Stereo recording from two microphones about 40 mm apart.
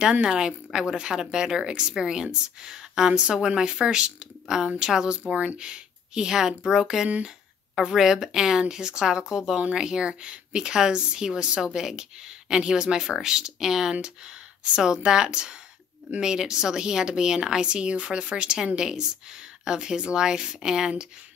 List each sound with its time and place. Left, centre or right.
0.0 s a woman's voice: right
14.6 s a woman's voice: right